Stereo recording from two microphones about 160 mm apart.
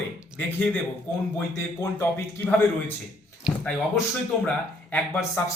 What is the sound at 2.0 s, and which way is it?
Speech, 15° left (ahead or behind).